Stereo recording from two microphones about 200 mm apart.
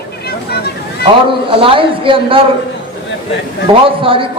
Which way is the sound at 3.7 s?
25° right (ahead or behind).